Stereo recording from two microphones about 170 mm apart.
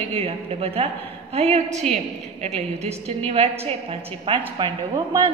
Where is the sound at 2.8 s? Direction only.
35° right (ahead or behind).